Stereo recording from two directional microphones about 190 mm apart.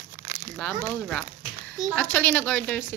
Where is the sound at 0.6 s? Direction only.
5° left (ahead or behind).